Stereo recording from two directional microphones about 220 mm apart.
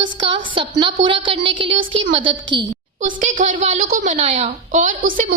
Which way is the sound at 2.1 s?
30° right (ahead or behind).